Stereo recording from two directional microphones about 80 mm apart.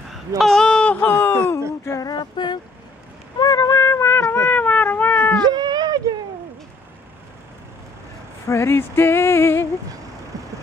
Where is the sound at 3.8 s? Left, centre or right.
Left.